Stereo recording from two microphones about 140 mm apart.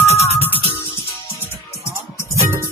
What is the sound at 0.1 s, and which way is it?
Music, 50° left (ahead or behind).